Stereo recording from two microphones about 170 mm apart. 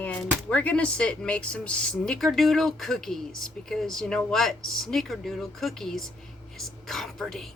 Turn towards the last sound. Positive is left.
turn(degrees=0)  # may be behind; listen again after turning